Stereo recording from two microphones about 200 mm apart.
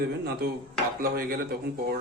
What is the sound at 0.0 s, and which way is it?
Speech, 50° right (ahead or behind).